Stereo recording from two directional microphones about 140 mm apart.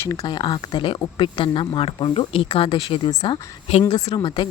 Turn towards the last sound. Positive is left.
turn(degrees=35)  # may be behind; listen again after turning